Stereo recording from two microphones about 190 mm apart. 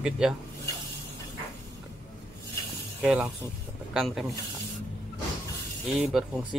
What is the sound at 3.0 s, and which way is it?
Speech, 5° right (ahead or behind).